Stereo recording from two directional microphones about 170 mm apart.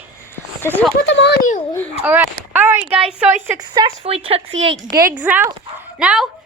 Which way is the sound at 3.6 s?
25° right (ahead or behind).